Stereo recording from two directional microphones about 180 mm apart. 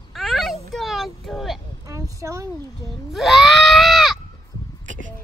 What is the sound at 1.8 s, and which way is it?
Speech, 15° right (ahead or behind).